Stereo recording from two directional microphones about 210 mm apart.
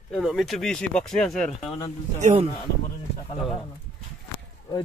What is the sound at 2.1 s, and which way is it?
Speech, 35° right (ahead or behind).